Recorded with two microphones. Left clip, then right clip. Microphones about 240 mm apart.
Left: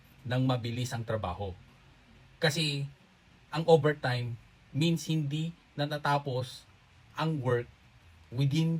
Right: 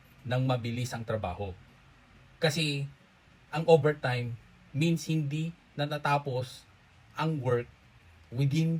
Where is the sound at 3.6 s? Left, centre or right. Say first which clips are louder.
Right 1 dB; centre.